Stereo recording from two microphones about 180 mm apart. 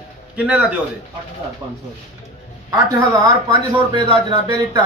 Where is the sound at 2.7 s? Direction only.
20° right (ahead or behind).